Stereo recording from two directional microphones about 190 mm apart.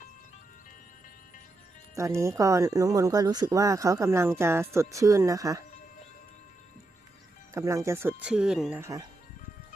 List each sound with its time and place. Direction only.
2.0 s speech: 15° right (ahead or behind)
7.5 s speech: 15° right (ahead or behind)
8.8 s speech: 15° right (ahead or behind)